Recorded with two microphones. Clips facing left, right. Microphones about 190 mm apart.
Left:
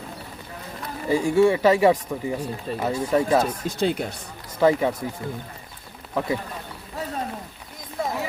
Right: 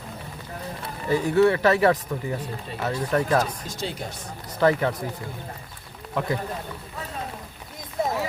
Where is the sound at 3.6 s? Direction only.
60° left (ahead or behind).